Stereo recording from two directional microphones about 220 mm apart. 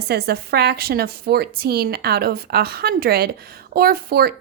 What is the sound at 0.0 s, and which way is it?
A woman's voice, 45° right (ahead or behind).